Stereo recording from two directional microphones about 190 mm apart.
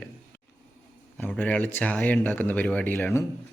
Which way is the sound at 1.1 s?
10° left (ahead or behind).